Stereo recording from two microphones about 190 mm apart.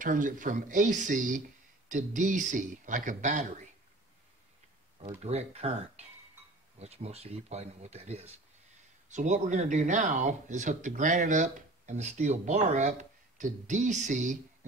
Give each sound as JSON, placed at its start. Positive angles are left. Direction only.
{"t": 0.0, "sound": "speech", "side_deg": -45}
{"t": 5.2, "sound": "speech", "side_deg": -35}